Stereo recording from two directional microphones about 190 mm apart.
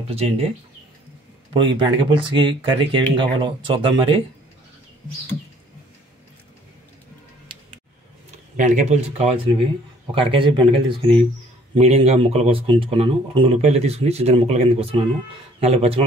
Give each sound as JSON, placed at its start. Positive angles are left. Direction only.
{"t": 0.1, "sound": "speech", "side_deg": -30}
{"t": 1.5, "sound": "speech", "side_deg": -25}
{"t": 8.5, "sound": "speech", "side_deg": -40}